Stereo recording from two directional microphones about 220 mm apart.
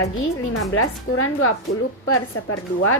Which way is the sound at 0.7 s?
70° left (ahead or behind).